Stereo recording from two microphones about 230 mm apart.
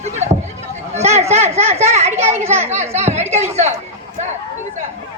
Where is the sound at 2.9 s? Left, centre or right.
Right.